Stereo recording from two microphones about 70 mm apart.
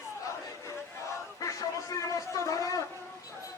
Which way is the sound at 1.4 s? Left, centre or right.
Left.